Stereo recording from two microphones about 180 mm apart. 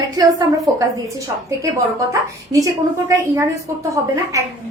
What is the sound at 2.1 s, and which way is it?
A woman's voice, 20° right (ahead or behind).